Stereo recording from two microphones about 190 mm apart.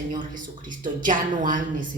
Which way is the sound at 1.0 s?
45° right (ahead or behind).